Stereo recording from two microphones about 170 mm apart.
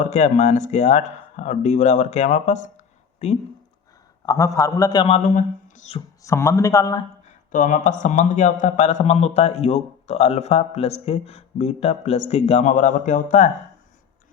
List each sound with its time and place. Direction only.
0.0 s speech: 45° left (ahead or behind)
4.3 s a man's voice: 20° left (ahead or behind)
5.0 s a man's voice: 45° left (ahead or behind)
6.2 s a man's voice: 15° left (ahead or behind)
7.5 s a man's voice: 50° left (ahead or behind)